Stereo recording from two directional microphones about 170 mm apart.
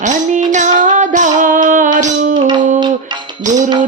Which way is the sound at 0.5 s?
50° right (ahead or behind).